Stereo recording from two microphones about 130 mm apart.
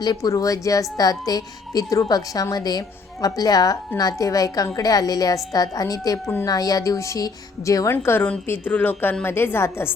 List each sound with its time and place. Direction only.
0.0 s a woman's voice: 30° left (ahead or behind)